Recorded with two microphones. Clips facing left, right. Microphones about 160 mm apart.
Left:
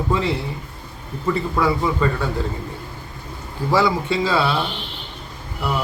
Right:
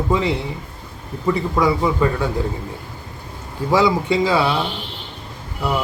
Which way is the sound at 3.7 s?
15° right (ahead or behind).